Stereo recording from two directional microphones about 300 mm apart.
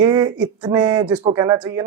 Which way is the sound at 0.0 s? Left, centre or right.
Centre.